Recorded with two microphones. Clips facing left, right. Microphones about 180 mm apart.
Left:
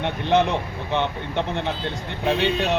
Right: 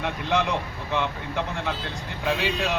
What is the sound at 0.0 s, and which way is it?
Speech, 25° left (ahead or behind).